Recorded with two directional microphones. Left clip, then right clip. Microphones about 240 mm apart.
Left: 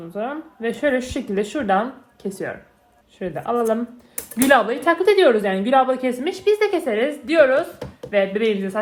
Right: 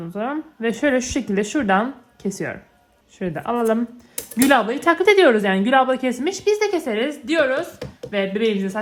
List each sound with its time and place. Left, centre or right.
0.1 s speech: right